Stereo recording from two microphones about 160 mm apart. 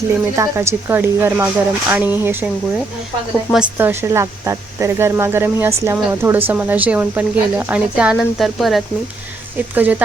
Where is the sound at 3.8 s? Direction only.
15° right (ahead or behind).